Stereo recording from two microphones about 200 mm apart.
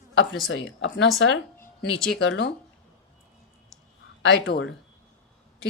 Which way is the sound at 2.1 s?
60° left (ahead or behind).